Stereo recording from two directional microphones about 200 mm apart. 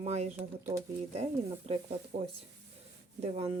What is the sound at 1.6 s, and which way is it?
Speech, 30° right (ahead or behind).